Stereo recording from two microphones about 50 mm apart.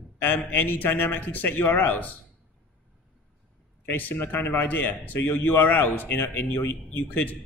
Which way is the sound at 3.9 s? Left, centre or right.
Left.